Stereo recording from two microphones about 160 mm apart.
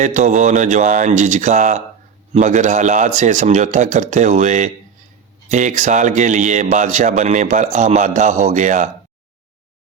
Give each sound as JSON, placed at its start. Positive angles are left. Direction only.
{"t": 0.0, "sound": "a man's voice", "side_deg": -50}